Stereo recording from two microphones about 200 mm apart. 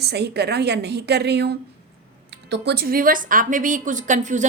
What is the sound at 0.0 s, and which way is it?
A woman's voice, 55° right (ahead or behind).